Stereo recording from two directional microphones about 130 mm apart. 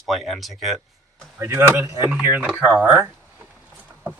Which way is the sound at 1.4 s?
20° right (ahead or behind).